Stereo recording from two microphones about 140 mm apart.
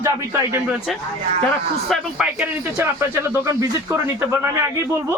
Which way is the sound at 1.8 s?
5° right (ahead or behind).